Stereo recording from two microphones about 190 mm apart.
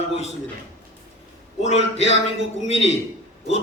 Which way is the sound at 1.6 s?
35° left (ahead or behind).